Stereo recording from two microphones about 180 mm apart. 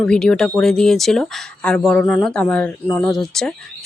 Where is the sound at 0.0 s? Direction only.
5° left (ahead or behind).